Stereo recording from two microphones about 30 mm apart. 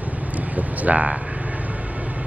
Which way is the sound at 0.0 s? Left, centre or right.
Right.